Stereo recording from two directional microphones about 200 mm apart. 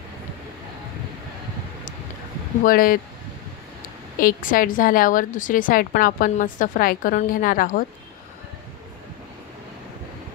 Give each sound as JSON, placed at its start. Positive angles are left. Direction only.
{"t": 2.6, "sound": "a woman's voice", "side_deg": 45}
{"t": 4.2, "sound": "a woman's voice", "side_deg": 45}